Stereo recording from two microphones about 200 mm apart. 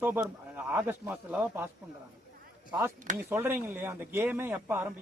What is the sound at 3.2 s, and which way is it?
Speech, 10° right (ahead or behind).